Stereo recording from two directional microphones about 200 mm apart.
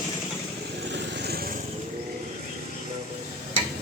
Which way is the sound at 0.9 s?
60° right (ahead or behind).